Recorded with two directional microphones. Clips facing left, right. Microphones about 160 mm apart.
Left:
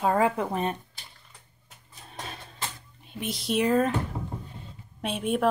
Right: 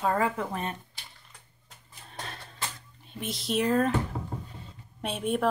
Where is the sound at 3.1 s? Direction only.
Centre (ahead or behind).